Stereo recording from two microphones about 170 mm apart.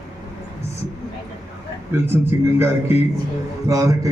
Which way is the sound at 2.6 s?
15° right (ahead or behind).